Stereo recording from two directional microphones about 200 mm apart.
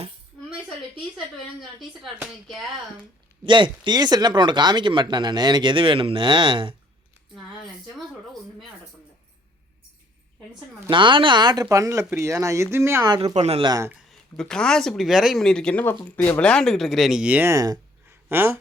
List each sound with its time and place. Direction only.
2.0 s speech: centre (ahead or behind)
3.4 s speech: 25° right (ahead or behind)
7.9 s speech: centre (ahead or behind)
10.8 s speech: 25° right (ahead or behind)
14.1 s speech: 5° left (ahead or behind)